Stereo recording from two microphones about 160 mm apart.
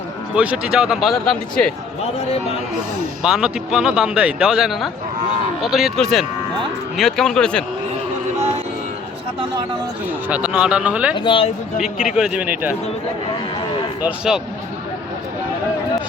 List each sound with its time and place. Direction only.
0.3 s speech: 5° right (ahead or behind)
3.2 s speech: 5° right (ahead or behind)
10.2 s speech: 10° right (ahead or behind)
11.2 s speech: 30° left (ahead or behind)
11.8 s speech: 5° right (ahead or behind)
14.0 s speech: 5° right (ahead or behind)